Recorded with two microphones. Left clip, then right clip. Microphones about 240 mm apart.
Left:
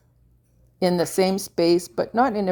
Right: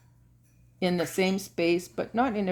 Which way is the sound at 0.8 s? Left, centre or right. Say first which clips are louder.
Left 6 dB; left.